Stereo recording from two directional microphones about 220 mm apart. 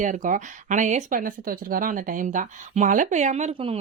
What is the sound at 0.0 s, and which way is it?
Speech, 35° right (ahead or behind).